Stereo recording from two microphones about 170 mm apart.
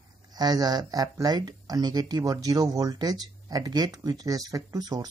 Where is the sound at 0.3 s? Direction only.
25° right (ahead or behind).